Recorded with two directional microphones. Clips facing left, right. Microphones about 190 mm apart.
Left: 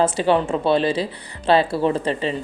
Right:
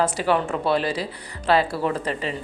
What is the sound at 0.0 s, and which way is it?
Speech, 25° left (ahead or behind).